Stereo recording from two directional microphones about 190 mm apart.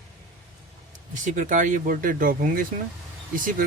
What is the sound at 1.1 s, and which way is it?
Speech, 40° right (ahead or behind).